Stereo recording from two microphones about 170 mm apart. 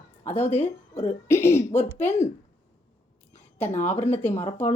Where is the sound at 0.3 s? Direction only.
10° left (ahead or behind).